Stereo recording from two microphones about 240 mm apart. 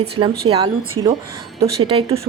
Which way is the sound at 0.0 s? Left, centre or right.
Right.